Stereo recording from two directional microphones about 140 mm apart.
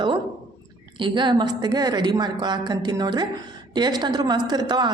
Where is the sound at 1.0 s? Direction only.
35° right (ahead or behind).